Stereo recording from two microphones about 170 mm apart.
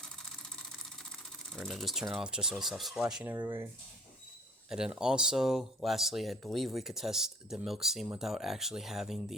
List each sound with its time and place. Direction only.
1.5 s speech: centre (ahead or behind)
3.3 s speech: 15° right (ahead or behind)
4.7 s speech: 5° right (ahead or behind)